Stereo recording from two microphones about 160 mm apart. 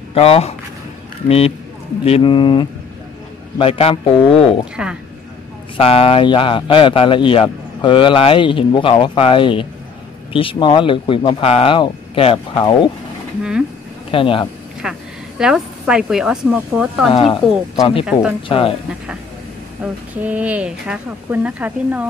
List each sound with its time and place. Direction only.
0.1 s speech: 35° left (ahead or behind)
2.0 s speech: 35° left (ahead or behind)
4.8 s speech: 5° right (ahead or behind)
5.8 s speech: 35° left (ahead or behind)
13.4 s a sound: 5° right (ahead or behind)
14.1 s speech: 35° left (ahead or behind)
14.8 s a woman's voice: 5° right (ahead or behind)
17.1 s speech: 30° left (ahead or behind)
19.8 s speech: 10° right (ahead or behind)